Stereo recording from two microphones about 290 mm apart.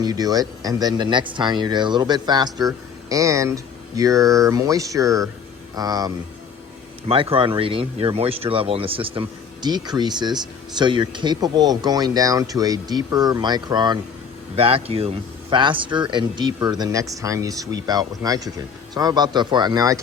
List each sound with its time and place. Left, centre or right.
0.0 s speech: centre